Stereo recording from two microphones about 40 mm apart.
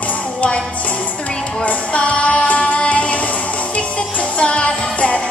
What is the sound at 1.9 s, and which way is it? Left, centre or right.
Music, left.